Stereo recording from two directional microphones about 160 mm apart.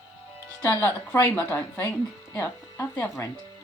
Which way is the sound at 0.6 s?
15° left (ahead or behind).